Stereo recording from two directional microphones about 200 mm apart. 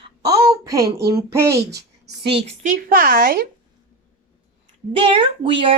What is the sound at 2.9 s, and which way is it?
Speech, 45° right (ahead or behind).